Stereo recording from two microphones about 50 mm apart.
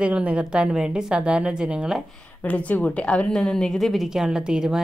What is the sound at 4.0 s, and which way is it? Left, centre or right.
Speech, centre.